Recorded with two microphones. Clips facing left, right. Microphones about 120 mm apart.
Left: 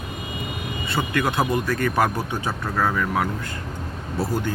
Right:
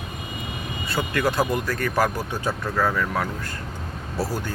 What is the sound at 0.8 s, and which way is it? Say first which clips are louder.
Speech: even; 25° left (ahead or behind).